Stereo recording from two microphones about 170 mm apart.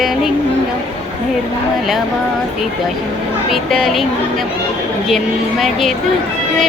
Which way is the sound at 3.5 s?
Centre (ahead or behind).